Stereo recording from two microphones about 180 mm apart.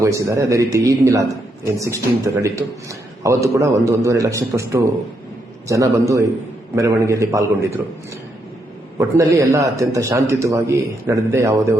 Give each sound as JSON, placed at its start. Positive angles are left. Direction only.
{"t": 0.0, "sound": "a man's voice", "side_deg": -15}
{"t": 9.0, "sound": "a man's voice", "side_deg": -15}